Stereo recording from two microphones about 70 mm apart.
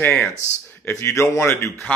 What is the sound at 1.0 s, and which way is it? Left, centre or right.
Speech, left.